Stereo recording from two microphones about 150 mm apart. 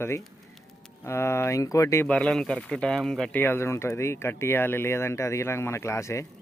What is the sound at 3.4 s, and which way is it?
Speech, 15° left (ahead or behind).